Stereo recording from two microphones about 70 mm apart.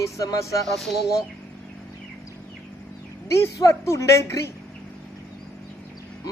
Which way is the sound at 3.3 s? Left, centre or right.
Left.